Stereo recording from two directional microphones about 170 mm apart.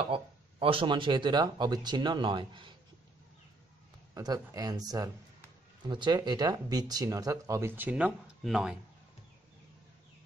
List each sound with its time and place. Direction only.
0.1 s speech: 30° right (ahead or behind)
4.1 s speech: 20° right (ahead or behind); by 8.7 s 5° right (ahead or behind)